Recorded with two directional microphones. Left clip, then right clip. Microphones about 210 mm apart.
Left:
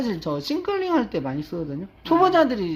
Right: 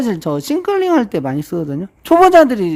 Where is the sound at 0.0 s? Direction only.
55° right (ahead or behind).